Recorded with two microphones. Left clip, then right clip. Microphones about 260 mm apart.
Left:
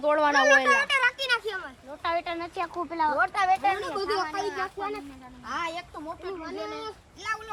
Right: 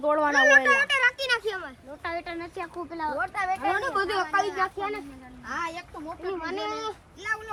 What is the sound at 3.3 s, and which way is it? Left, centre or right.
Speech, left.